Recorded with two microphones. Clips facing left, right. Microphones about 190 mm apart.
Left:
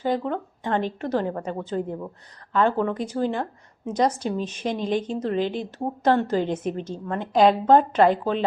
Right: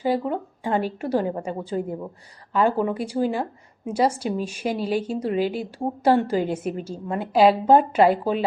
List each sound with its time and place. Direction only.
0.0 s a woman's voice: 10° right (ahead or behind)